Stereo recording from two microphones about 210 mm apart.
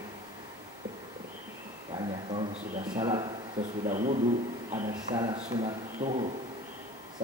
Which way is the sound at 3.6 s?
35° right (ahead or behind).